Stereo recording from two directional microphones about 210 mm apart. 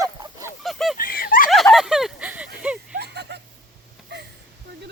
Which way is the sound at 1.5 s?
Centre (ahead or behind).